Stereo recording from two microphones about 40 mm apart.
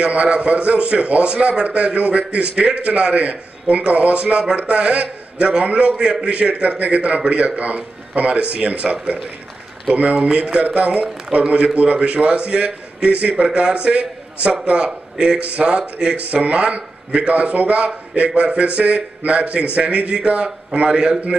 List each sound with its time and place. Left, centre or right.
0.0 s a man's voice: right
9.9 s a man's voice: right
11.3 s a man's voice: right
16.4 s a man's voice: right